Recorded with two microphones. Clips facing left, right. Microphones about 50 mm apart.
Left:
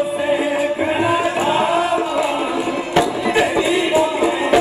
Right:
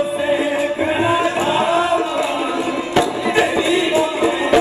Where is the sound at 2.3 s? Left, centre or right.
Centre.